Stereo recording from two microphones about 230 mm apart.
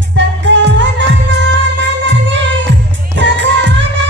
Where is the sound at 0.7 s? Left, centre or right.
Right.